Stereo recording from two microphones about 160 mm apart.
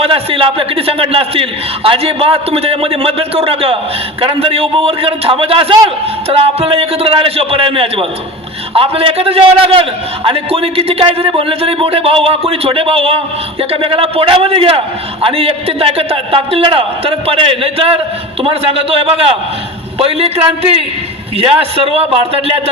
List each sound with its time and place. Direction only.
0.0 s a man's voice: 35° right (ahead or behind)